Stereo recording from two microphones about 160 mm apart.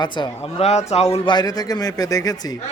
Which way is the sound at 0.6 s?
40° left (ahead or behind).